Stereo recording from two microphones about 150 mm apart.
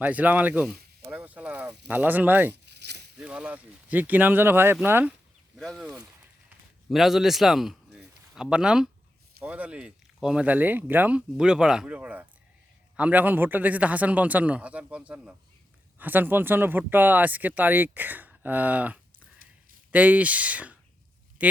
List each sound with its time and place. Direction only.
0.0 s speech: 10° right (ahead or behind)
1.0 s a sound: 10° right (ahead or behind)
1.9 s speech: 10° right (ahead or behind)
2.6 s a sound: 90° right
3.2 s speech: 10° right (ahead or behind)
5.5 s a man's voice: centre (ahead or behind)